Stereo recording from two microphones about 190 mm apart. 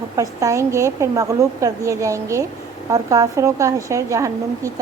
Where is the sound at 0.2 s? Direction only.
15° right (ahead or behind).